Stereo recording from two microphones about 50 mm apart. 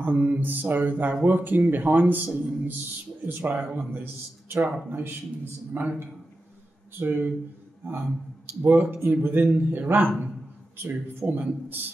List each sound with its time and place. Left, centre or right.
0.0 s speech: right